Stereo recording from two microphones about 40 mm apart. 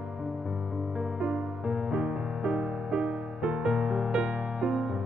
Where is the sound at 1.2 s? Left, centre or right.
Centre.